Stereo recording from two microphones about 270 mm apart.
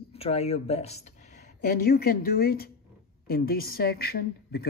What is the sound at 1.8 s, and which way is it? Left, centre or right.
A man's voice, left.